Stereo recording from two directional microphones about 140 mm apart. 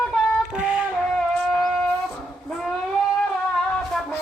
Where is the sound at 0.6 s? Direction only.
10° right (ahead or behind).